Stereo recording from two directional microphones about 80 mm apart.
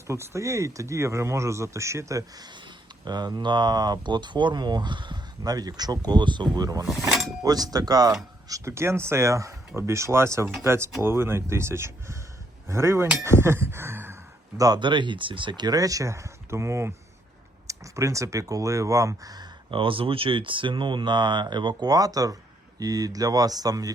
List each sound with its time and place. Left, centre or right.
0.1 s speech: right
5.4 s speech: right
7.1 s speech: centre
7.4 s speech: right
14.8 s speech: right
19.7 s speech: right